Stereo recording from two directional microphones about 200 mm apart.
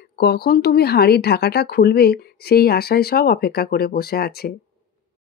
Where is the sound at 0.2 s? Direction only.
50° left (ahead or behind).